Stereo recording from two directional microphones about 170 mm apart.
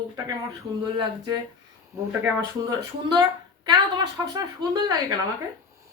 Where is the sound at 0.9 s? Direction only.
25° right (ahead or behind).